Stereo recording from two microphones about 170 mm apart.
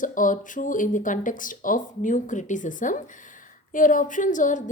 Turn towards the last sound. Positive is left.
turn(degrees=50)  # may be behind; listen again after turning